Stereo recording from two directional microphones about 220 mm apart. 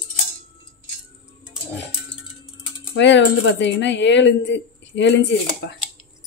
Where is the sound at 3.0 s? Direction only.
55° left (ahead or behind).